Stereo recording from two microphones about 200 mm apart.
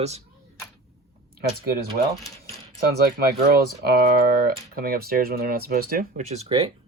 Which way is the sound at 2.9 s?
50° right (ahead or behind).